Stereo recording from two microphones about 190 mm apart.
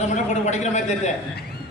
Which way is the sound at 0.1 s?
40° left (ahead or behind).